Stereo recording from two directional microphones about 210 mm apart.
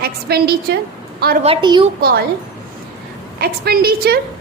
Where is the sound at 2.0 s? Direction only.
45° right (ahead or behind).